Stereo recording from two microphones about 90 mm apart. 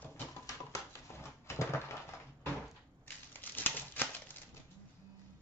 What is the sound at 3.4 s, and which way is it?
Crumpling, 20° left (ahead or behind).